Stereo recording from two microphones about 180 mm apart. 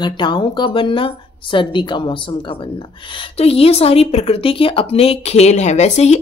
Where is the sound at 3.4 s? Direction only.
35° left (ahead or behind).